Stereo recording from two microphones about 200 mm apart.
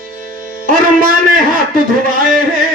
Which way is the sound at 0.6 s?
45° right (ahead or behind).